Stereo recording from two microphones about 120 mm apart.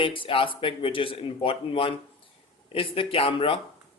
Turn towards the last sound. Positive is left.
turn(degrees=50)  # may be behind; listen again after turning